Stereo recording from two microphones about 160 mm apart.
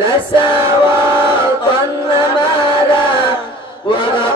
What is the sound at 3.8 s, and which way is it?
Chant, 30° left (ahead or behind).